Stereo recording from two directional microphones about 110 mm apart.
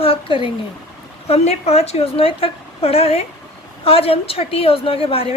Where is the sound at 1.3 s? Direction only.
70° left (ahead or behind).